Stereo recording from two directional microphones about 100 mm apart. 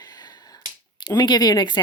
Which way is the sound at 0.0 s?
45° left (ahead or behind).